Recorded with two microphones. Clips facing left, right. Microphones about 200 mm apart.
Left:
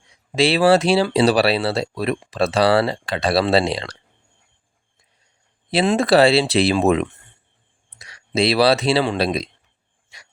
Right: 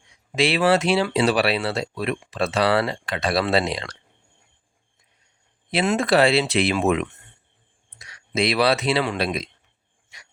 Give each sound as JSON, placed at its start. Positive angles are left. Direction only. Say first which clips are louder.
{"t": 0.3, "sound": "speech", "louder": "left 4 dB", "side_deg": 35}
{"t": 5.7, "sound": "speech", "louder": "left 4 dB", "side_deg": 30}